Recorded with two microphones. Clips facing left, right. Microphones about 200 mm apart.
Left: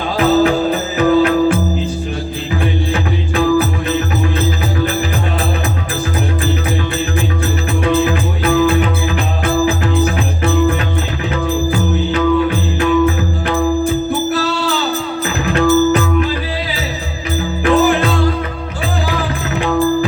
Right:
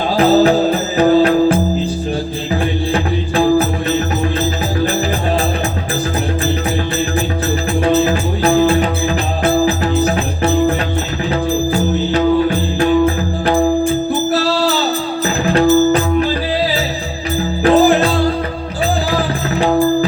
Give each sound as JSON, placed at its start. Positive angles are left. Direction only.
{"t": 0.2, "sound": "music", "side_deg": -35}
{"t": 2.9, "sound": "music", "side_deg": -35}
{"t": 7.9, "sound": "music", "side_deg": -30}
{"t": 12.1, "sound": "music", "side_deg": -35}
{"t": 17.6, "sound": "music", "side_deg": -35}